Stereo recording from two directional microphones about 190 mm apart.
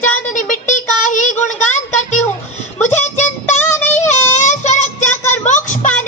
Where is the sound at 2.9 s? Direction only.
40° left (ahead or behind).